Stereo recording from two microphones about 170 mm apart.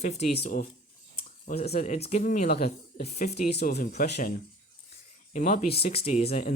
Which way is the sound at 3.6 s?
65° left (ahead or behind).